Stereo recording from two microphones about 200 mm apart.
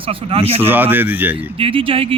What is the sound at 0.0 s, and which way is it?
Speech, 25° right (ahead or behind).